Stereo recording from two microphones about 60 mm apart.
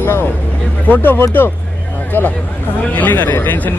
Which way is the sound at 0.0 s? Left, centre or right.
Left.